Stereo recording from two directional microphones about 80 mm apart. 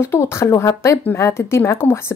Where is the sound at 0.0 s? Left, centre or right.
Left.